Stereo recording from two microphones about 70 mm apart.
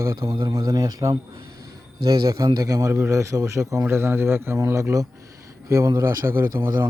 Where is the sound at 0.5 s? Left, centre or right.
Right.